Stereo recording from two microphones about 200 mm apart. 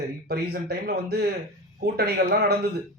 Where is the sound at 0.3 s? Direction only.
55° right (ahead or behind).